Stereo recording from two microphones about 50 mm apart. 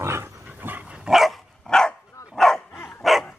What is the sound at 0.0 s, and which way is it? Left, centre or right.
Dog, right.